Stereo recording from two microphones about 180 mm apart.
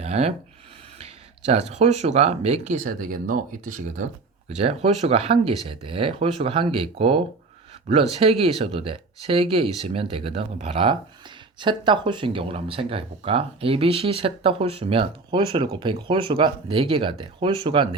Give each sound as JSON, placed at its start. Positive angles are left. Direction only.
{"t": 0.0, "sound": "speech", "side_deg": -35}
{"t": 1.5, "sound": "speech", "side_deg": -40}
{"t": 4.4, "sound": "speech", "side_deg": -35}